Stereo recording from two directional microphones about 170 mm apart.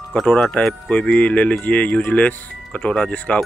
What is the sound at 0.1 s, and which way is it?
Speech, 5° left (ahead or behind).